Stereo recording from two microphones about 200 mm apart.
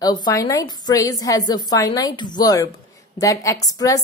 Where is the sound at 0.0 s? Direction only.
20° left (ahead or behind).